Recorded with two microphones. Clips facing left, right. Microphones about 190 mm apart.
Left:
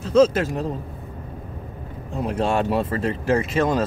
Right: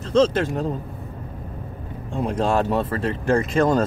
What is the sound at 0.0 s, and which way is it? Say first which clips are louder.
Speech: left 2 dB; 5° left (ahead or behind).